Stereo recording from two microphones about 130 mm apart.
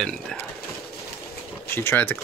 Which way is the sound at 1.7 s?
15° left (ahead or behind).